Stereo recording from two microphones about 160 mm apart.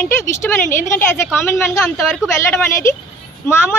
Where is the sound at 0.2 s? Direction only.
15° left (ahead or behind).